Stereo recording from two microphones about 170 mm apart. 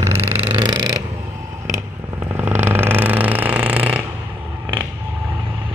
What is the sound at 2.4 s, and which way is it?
Vehicle, 15° right (ahead or behind).